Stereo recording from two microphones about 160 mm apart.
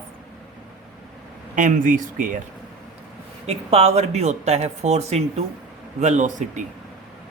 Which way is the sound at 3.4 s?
40° right (ahead or behind).